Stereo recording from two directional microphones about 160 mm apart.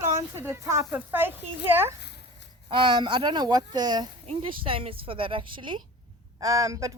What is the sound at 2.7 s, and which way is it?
Speech, 30° right (ahead or behind).